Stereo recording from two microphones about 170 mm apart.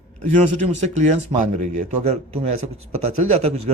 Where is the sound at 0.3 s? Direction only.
45° right (ahead or behind).